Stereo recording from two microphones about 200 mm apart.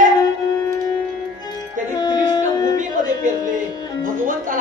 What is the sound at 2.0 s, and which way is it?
Music, 20° left (ahead or behind).